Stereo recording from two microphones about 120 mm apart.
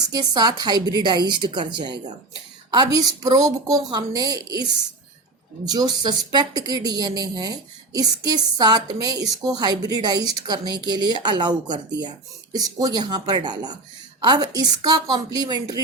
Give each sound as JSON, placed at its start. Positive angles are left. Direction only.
{"t": 0.1, "sound": "a woman's voice", "side_deg": -35}
{"t": 5.6, "sound": "a woman's voice", "side_deg": -35}